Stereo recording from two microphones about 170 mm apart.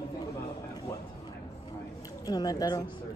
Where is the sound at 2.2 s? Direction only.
20° left (ahead or behind).